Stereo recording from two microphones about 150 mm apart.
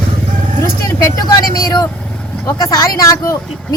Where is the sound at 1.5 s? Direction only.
25° left (ahead or behind).